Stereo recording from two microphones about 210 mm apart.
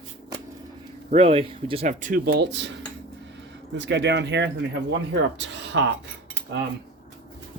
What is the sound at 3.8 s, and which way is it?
Speech, 55° right (ahead or behind).